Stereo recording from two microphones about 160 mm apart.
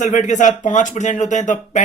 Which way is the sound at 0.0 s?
50° left (ahead or behind).